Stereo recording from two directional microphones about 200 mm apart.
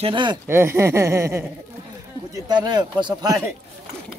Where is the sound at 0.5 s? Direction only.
10° right (ahead or behind).